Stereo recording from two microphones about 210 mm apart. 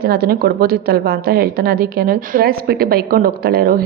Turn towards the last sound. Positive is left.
turn(degrees=-45)  # may be behind; listen again after turning